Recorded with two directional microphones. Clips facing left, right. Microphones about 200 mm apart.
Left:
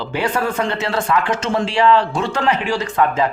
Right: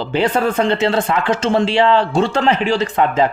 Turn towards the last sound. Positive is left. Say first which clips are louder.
# right 2 dB
turn(degrees=-25)  # may be behind; listen again after turning